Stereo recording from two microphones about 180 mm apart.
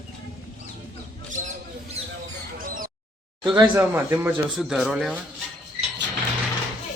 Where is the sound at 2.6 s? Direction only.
50° right (ahead or behind).